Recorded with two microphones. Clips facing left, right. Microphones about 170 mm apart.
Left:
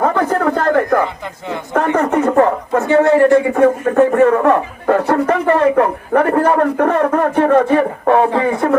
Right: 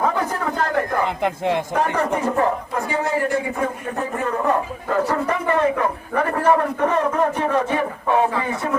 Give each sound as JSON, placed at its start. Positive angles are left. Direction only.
{"t": 0.0, "sound": "a sound", "side_deg": 60}
{"t": 1.2, "sound": "speech", "side_deg": -75}
{"t": 1.7, "sound": "speech", "side_deg": 65}